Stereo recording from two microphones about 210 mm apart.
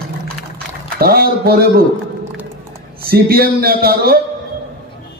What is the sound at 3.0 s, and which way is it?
A man's voice, 45° right (ahead or behind).